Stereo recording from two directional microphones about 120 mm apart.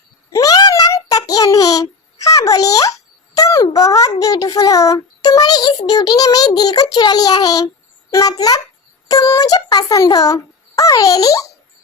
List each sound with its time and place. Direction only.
0.3 s a child's voice: 30° left (ahead or behind)